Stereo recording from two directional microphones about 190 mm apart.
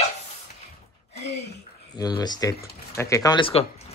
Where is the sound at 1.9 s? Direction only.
20° left (ahead or behind).